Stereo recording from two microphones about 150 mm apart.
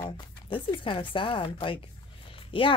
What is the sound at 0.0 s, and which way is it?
A woman's voice, 30° left (ahead or behind).